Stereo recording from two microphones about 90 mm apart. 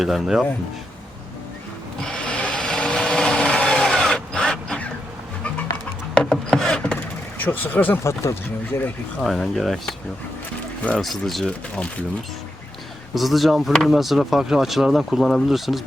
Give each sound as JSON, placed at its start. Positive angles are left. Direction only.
{"t": 0.0, "sound": "speech", "side_deg": 0}
{"t": 2.0, "sound": "a sound", "side_deg": 10}
{"t": 6.1, "sound": "a sound", "side_deg": 5}
{"t": 7.4, "sound": "speech", "side_deg": 20}
{"t": 8.0, "sound": "speech", "side_deg": 30}
{"t": 9.2, "sound": "speech", "side_deg": 0}
{"t": 11.0, "sound": "speech", "side_deg": 0}
{"t": 13.1, "sound": "speech", "side_deg": 0}